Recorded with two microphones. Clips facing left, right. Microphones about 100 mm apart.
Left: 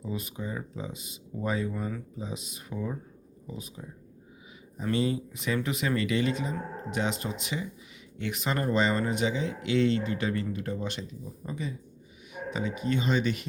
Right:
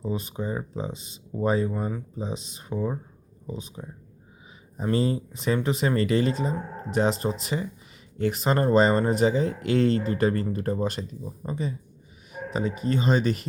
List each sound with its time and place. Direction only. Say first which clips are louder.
0.0 s speech: right 5 dB; 30° right (ahead or behind)